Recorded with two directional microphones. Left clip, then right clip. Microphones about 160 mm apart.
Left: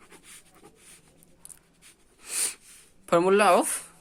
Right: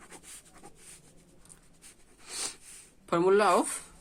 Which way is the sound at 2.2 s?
25° left (ahead or behind).